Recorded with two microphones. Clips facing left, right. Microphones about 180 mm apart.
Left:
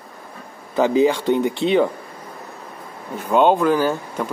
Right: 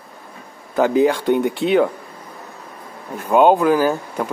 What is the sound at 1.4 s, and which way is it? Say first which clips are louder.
Speech: even; centre (ahead or behind).